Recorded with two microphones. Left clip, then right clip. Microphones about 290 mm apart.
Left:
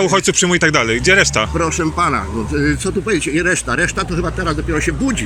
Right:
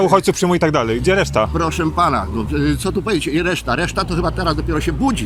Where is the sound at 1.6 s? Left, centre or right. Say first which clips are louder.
Even; centre.